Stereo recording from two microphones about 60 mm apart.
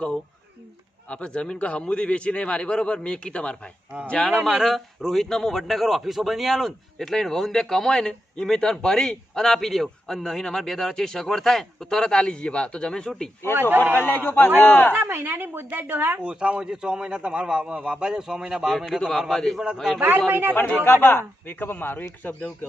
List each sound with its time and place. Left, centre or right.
1.1 s speech: centre
4.4 s a man's voice: centre
13.9 s a man's voice: left
14.9 s a woman's voice: right
16.1 s a man's voice: centre
18.9 s speech: centre
20.0 s a woman's voice: right
20.8 s a man's voice: left